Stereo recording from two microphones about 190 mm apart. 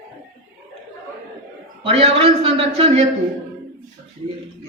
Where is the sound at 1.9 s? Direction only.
30° right (ahead or behind).